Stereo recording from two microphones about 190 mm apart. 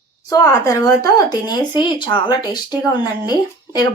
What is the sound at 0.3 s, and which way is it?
A woman's voice, 20° left (ahead or behind).